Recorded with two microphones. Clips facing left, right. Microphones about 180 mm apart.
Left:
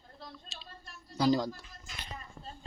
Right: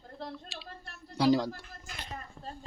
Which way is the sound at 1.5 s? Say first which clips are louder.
Right 2 dB; 65° right (ahead or behind).